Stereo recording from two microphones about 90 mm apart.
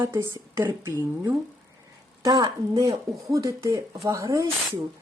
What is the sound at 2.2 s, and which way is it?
Speech, 50° right (ahead or behind).